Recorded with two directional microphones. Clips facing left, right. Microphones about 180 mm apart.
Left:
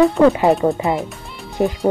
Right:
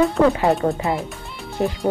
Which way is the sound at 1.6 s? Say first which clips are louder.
Left 4 dB; 20° left (ahead or behind).